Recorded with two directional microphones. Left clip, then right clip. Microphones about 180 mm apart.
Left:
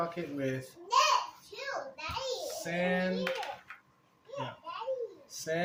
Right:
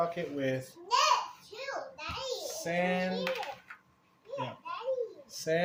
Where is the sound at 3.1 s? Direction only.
Centre (ahead or behind).